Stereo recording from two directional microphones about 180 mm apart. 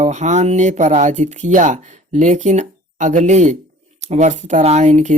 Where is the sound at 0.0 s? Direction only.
40° right (ahead or behind).